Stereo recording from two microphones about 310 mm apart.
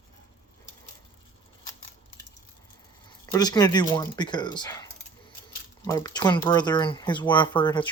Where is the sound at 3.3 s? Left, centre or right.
Centre.